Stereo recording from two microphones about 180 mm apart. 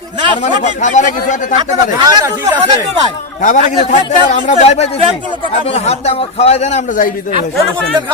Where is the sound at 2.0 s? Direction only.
20° right (ahead or behind).